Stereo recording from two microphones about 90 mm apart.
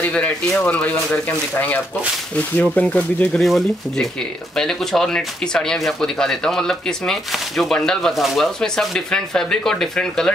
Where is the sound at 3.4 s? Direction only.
Centre (ahead or behind).